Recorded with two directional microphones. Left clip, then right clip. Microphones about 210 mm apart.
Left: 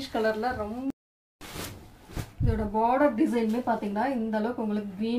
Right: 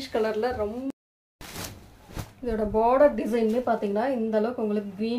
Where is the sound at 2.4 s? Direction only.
45° right (ahead or behind).